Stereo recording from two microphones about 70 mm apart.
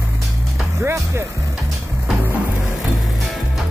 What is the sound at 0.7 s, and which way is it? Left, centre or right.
Speech, right.